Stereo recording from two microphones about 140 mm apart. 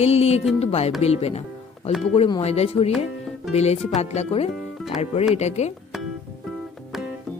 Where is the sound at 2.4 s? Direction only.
50° left (ahead or behind).